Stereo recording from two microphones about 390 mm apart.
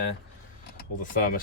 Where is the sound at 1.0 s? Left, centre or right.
Left.